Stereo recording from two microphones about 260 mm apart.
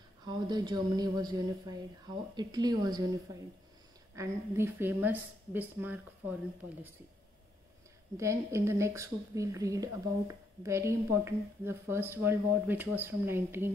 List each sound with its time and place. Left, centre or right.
0.2 s a woman's voice: centre
4.1 s a woman's voice: centre
8.2 s a woman's voice: centre